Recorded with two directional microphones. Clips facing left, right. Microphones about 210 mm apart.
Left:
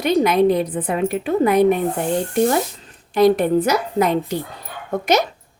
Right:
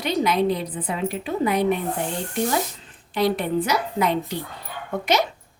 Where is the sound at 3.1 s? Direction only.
45° left (ahead or behind).